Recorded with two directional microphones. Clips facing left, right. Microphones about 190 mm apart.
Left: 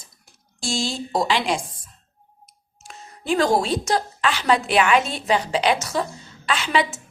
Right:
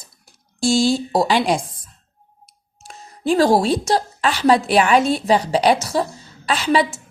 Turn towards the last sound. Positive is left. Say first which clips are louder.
# right 4 dB
turn(degrees=-35)  # may be behind; listen again after turning